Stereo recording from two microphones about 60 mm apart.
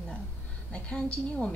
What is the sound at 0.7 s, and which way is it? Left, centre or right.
Speech, left.